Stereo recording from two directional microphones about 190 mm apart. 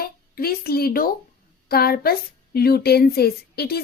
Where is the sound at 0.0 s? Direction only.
55° left (ahead or behind).